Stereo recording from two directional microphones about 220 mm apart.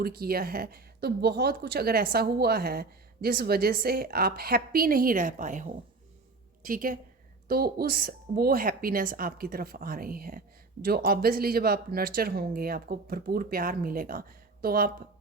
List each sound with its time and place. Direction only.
0.0 s a woman's voice: 45° right (ahead or behind)